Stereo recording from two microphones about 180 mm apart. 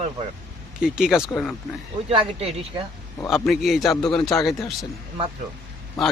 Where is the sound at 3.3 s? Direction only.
Centre (ahead or behind).